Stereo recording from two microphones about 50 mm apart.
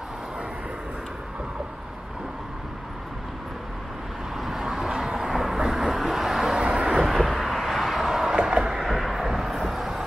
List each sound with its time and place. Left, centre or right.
4.4 s vehicle: centre
6.6 s vehicle: right
7.1 s vehicle: centre